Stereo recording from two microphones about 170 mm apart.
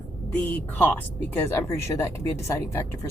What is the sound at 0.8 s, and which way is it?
Speech, 10° left (ahead or behind).